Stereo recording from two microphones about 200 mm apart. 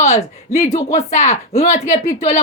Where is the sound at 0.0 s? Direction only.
30° left (ahead or behind).